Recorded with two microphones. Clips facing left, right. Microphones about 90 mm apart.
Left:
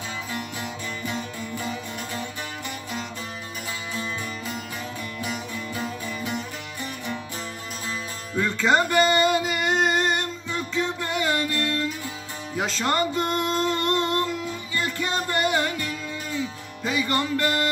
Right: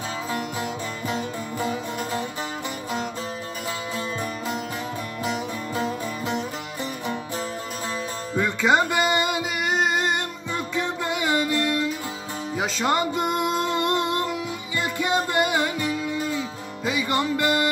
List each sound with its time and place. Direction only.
0.3 s music: 35° right (ahead or behind)
1.6 s music: 25° right (ahead or behind)
5.2 s music: 30° right (ahead or behind)
8.4 s music: 15° right (ahead or behind)